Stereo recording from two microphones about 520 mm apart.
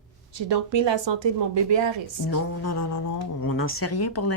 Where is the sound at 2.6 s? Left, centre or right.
Left.